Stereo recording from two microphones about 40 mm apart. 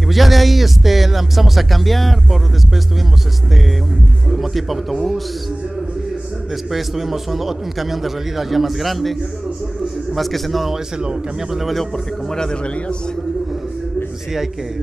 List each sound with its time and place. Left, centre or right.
0.1 s speech: centre
4.3 s speech: centre
6.7 s speech: centre
10.1 s speech: centre
12.3 s a man's voice: centre